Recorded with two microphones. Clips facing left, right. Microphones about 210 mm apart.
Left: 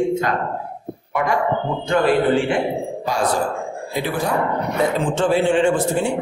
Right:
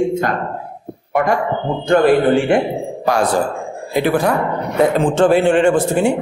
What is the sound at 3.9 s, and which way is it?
A man's voice, 65° right (ahead or behind).